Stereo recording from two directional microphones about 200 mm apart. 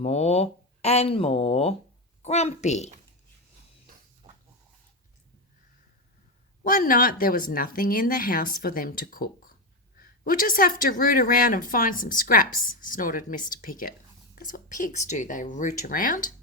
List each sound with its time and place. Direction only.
0.0 s speech: 30° left (ahead or behind)
6.7 s a woman's voice: 45° left (ahead or behind)